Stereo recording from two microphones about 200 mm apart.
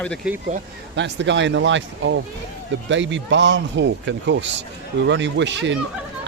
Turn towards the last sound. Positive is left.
turn(degrees=-65)  # may be behind; listen again after turning